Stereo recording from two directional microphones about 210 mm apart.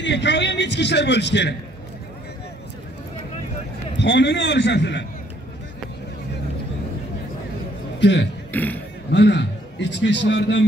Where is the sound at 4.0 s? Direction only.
55° left (ahead or behind).